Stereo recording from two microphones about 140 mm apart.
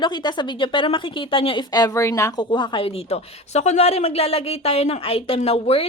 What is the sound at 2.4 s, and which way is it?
A woman's voice, 35° left (ahead or behind).